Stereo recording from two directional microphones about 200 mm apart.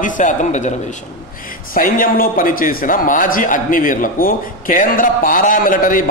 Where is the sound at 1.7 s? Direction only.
45° left (ahead or behind).